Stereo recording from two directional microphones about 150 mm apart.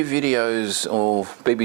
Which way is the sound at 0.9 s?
35° right (ahead or behind).